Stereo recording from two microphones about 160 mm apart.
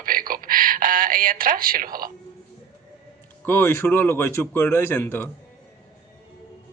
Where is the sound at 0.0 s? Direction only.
60° right (ahead or behind).